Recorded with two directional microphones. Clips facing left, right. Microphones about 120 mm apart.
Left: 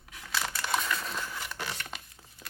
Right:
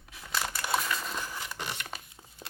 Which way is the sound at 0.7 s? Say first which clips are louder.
Even; 5° right (ahead or behind).